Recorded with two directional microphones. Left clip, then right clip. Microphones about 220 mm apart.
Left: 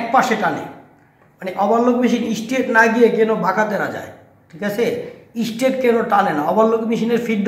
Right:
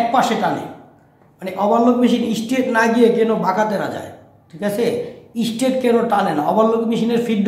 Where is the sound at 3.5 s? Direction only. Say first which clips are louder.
Even; 20° right (ahead or behind).